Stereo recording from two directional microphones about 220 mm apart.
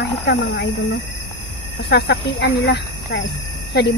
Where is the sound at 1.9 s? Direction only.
50° left (ahead or behind).